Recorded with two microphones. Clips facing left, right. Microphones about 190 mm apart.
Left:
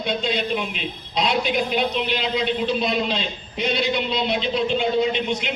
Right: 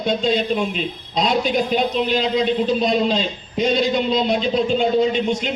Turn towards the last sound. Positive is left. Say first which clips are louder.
# right 4 dB
turn(degrees=-45)  # may be behind; listen again after turning